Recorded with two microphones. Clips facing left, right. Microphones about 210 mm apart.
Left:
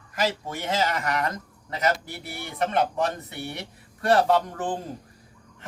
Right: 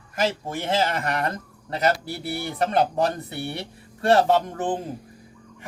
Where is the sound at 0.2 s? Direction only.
25° right (ahead or behind).